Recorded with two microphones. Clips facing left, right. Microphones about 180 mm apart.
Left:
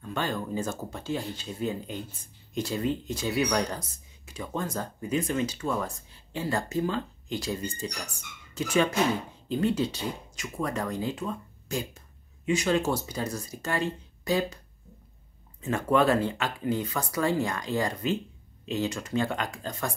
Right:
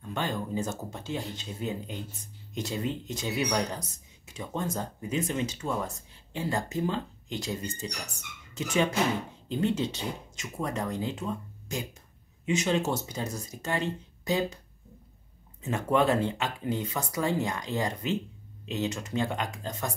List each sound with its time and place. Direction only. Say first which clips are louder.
0.1 s speech: left 1 dB; 20° right (ahead or behind)
15.6 s speech: left 2 dB; 20° right (ahead or behind)